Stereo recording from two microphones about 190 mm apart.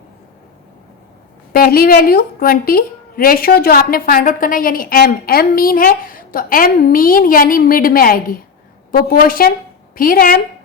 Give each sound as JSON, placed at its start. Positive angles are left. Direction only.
{"t": 1.5, "sound": "a woman's voice", "side_deg": 50}